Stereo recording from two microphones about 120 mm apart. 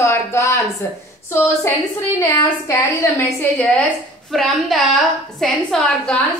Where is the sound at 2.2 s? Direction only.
30° left (ahead or behind).